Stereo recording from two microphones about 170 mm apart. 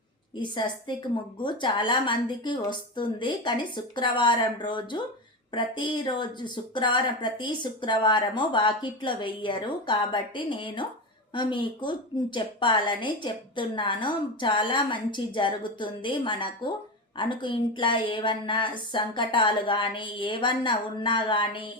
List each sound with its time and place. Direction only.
0.3 s speech: 25° left (ahead or behind)